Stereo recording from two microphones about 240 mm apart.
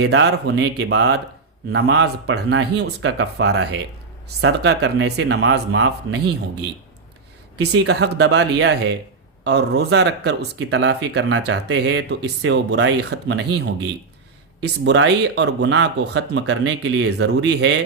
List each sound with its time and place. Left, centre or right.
0.0 s speech: right
7.6 s speech: right
14.6 s speech: right